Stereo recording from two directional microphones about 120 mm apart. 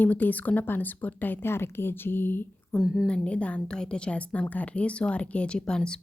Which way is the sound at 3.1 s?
10° left (ahead or behind).